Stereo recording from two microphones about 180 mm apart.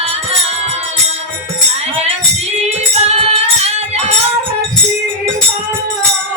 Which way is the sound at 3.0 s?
35° right (ahead or behind).